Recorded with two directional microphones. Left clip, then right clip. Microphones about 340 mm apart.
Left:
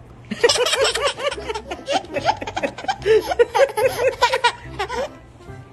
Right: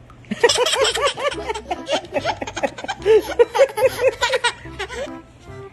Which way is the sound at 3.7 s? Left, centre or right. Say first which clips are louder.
Right 1 dB; centre.